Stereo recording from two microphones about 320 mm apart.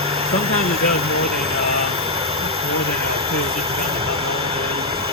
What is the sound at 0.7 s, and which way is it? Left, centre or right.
Speech, left.